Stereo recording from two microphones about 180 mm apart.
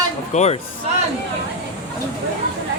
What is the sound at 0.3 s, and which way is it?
Speech, 40° left (ahead or behind).